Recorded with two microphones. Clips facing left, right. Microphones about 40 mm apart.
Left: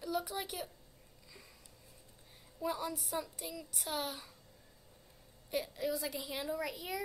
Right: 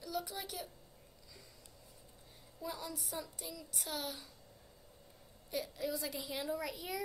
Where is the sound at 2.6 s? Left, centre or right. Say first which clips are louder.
Left 6 dB; centre.